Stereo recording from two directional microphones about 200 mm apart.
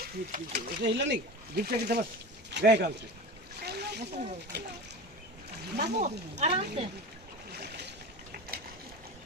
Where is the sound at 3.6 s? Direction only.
55° right (ahead or behind).